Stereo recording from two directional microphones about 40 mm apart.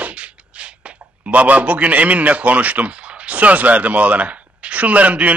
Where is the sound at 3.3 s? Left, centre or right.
Right.